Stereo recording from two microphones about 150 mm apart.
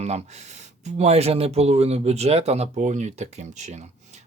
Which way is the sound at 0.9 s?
45° right (ahead or behind).